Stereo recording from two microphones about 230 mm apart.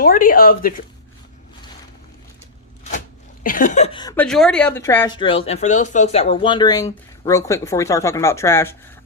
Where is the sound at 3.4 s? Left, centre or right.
Left.